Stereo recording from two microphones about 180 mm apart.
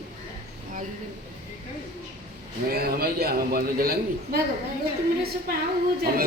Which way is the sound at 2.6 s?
60° right (ahead or behind).